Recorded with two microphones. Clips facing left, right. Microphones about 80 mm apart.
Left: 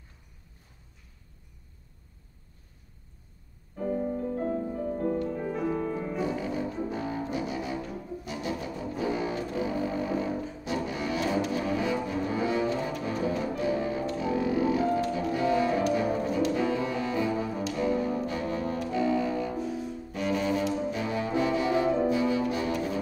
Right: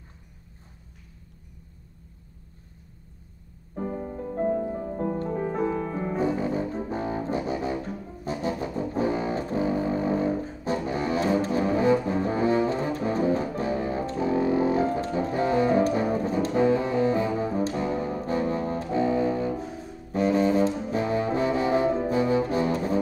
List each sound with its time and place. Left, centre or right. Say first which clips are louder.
3.7 s music: left 2 dB; right
4.6 s music: right 3 dB; right
4.8 s music: even; right
20.1 s brass instrument: right 7 dB; right